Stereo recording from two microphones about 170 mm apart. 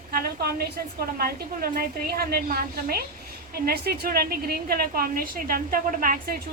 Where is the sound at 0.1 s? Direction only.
60° right (ahead or behind).